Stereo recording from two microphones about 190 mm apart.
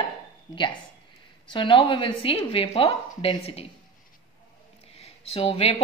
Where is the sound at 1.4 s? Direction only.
25° left (ahead or behind).